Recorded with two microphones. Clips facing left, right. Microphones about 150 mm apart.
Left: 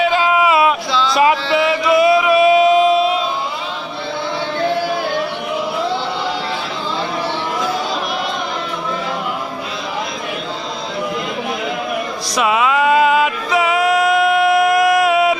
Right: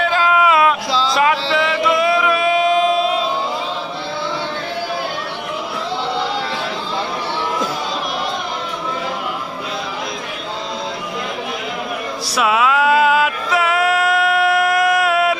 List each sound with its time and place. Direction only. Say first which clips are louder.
0.0 s a sound: left 1 dB; 5° left (ahead or behind)
1.5 s music: left 2 dB; 5° left (ahead or behind)
12.4 s music: left 1 dB; centre (ahead or behind)